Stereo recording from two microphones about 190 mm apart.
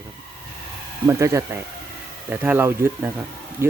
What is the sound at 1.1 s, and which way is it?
Speech, 15° right (ahead or behind).